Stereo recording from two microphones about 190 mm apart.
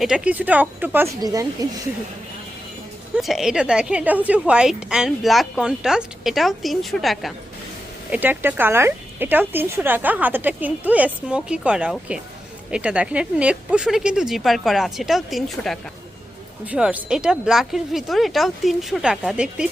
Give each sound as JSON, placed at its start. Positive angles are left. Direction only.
{"t": 0.0, "sound": "speech", "side_deg": -5}
{"t": 3.2, "sound": "a woman's voice", "side_deg": 0}